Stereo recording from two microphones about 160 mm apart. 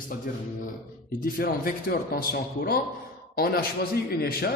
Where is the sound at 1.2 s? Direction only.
65° left (ahead or behind).